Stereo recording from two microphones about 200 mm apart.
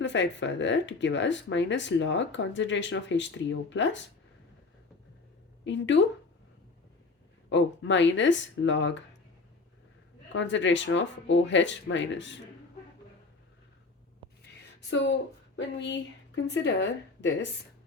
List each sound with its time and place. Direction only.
0.0 s speech: 65° left (ahead or behind)
5.6 s speech: 65° left (ahead or behind)
7.5 s speech: 65° left (ahead or behind)
10.3 s speech: 65° left (ahead or behind)
14.8 s speech: 60° left (ahead or behind)